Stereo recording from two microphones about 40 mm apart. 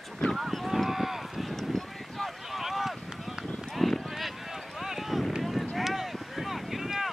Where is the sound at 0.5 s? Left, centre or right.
Centre.